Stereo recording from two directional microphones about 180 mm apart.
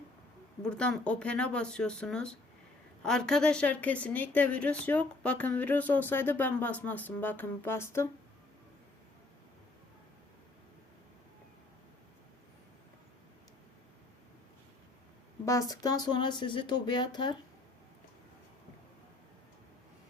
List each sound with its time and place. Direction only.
0.6 s a woman's voice: 5° left (ahead or behind)
15.4 s speech: 20° left (ahead or behind)